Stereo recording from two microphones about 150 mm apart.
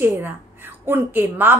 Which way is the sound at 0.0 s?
15° right (ahead or behind).